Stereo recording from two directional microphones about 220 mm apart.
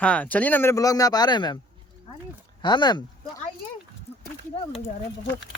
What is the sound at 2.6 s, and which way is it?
Speech, 20° left (ahead or behind).